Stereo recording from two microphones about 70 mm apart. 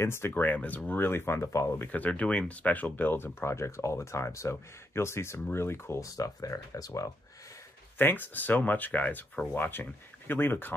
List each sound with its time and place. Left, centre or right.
0.0 s speech: left
0.4 s speech: left
1.9 s speech: left
3.3 s speech: left
6.1 s speech: left
8.0 s speech: left
9.6 s speech: left